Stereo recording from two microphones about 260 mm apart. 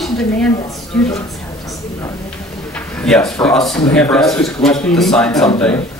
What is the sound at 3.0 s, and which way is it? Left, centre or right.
Speech, centre.